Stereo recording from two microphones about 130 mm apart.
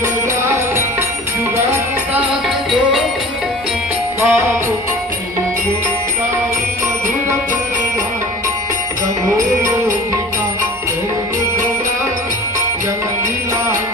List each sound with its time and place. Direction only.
4.2 s music: 15° right (ahead or behind)